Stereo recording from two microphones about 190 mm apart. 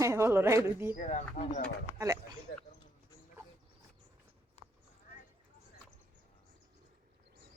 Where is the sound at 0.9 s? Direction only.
40° left (ahead or behind).